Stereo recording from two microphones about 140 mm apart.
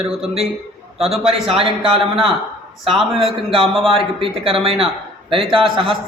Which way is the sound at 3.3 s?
40° right (ahead or behind).